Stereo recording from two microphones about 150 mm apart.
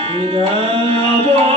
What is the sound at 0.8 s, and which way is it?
Music, 40° right (ahead or behind).